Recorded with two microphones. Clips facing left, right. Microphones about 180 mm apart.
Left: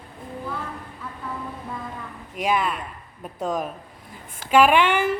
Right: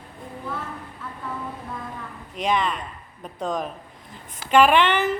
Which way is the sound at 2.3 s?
5° left (ahead or behind).